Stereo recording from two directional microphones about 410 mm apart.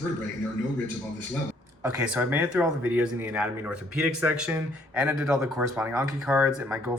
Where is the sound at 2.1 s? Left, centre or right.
Centre.